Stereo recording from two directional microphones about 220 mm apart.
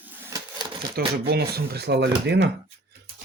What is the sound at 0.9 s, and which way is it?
Speech, 45° right (ahead or behind).